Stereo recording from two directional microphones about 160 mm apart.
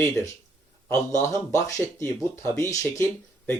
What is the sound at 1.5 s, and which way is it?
Speech, 20° left (ahead or behind).